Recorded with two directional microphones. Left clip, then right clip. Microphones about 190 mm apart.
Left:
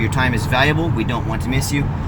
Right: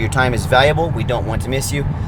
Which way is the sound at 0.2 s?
35° right (ahead or behind).